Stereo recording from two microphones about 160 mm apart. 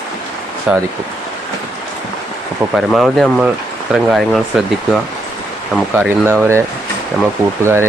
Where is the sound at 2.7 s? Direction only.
Centre (ahead or behind).